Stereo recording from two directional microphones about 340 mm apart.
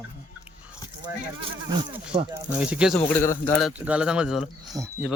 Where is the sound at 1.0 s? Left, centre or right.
Centre.